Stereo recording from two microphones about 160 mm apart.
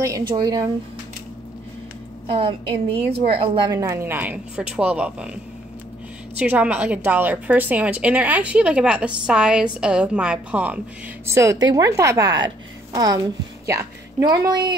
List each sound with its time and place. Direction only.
0.4 s a woman's voice: 25° right (ahead or behind)
2.2 s a woman's voice: 35° right (ahead or behind)
3.7 s a woman's voice: 20° right (ahead or behind)